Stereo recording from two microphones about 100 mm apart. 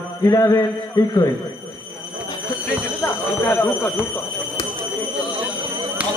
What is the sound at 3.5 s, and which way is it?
Speech, 20° left (ahead or behind).